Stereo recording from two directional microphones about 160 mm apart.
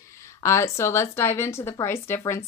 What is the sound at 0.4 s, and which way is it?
Speech, 15° left (ahead or behind).